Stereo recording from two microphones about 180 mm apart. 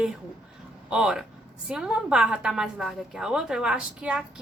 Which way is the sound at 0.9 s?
5° right (ahead or behind).